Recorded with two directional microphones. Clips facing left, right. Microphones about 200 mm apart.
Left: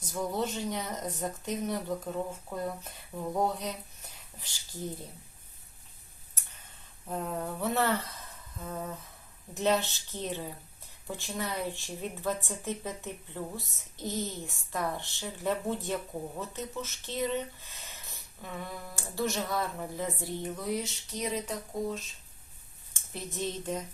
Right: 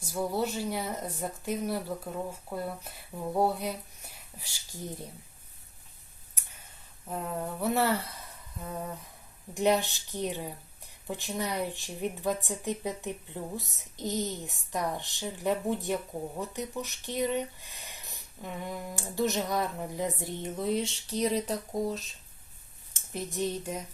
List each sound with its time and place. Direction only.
0.0 s speech: 5° right (ahead or behind)
7.1 s speech: centre (ahead or behind); by 22.0 s 35° right (ahead or behind)
23.0 s speech: 15° right (ahead or behind)